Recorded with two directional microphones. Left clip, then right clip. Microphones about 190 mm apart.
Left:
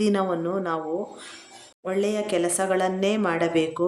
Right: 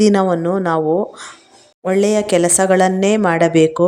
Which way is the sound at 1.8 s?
40° right (ahead or behind).